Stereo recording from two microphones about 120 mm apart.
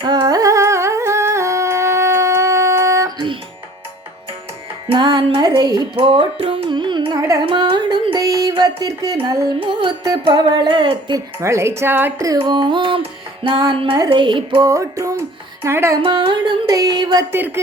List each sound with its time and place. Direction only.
0.0 s music: 35° right (ahead or behind)
4.9 s music: 40° right (ahead or behind)
6.0 s carnatic music: 45° right (ahead or behind)
7.2 s carnatic music: 25° right (ahead or behind)
7.4 s music: 45° right (ahead or behind)
9.6 s music: 45° right (ahead or behind)
11.3 s a woman's voice: 25° right (ahead or behind)
12.4 s music: 40° right (ahead or behind)
14.6 s music: 25° right (ahead or behind)
15.6 s a woman's voice: 20° right (ahead or behind)
16.0 s music: 45° right (ahead or behind)
16.7 s music: 30° right (ahead or behind)
17.3 s speech: 15° right (ahead or behind)